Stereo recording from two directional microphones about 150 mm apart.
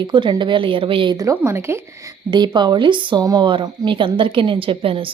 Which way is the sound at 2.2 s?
30° right (ahead or behind).